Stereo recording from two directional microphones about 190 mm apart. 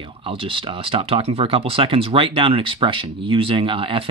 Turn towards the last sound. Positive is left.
turn(degrees=-30)  # may be behind; listen again after turning